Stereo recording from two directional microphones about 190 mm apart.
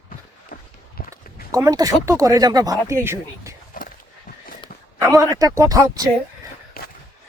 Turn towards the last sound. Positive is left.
turn(degrees=55)  # may be behind; listen again after turning